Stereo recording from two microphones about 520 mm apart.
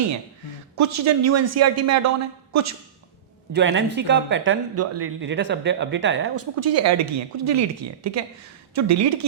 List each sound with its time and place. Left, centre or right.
0.8 s a man's voice: right
3.5 s a man's voice: right